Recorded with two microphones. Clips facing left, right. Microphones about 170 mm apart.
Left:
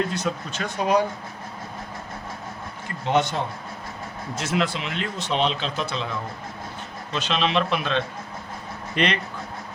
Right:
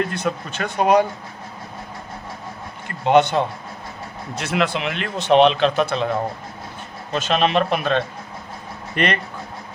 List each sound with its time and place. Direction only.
0.1 s speech: 55° right (ahead or behind)
3.1 s speech: 65° right (ahead or behind)